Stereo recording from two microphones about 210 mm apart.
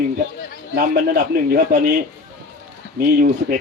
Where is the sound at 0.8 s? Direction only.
45° right (ahead or behind).